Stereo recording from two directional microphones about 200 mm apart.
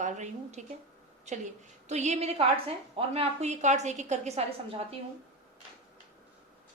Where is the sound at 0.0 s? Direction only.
35° right (ahead or behind).